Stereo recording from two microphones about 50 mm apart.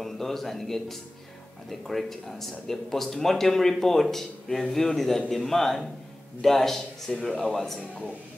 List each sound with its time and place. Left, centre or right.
0.0 s speech: centre
7.1 s speech: centre